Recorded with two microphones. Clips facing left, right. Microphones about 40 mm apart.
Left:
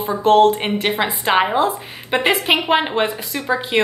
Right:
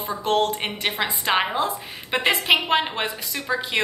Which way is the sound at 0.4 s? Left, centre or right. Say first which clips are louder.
Left 9 dB; centre.